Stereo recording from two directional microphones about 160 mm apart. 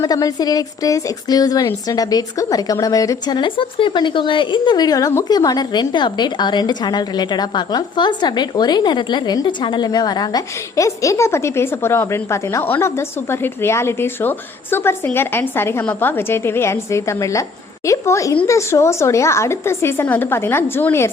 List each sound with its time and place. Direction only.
0.0 s a woman's voice: 20° left (ahead or behind)